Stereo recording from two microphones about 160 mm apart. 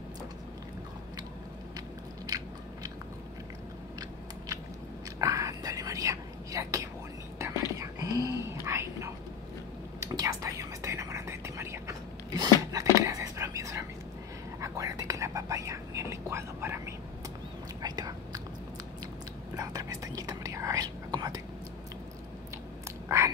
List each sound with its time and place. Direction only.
2.2 s biting: 25° right (ahead or behind)
5.2 s whispering: 20° right (ahead or behind)
19.5 s whispering: 20° right (ahead or behind)
23.0 s whispering: 20° right (ahead or behind)